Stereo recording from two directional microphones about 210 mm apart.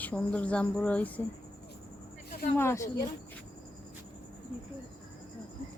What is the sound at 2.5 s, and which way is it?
Speech, 10° left (ahead or behind).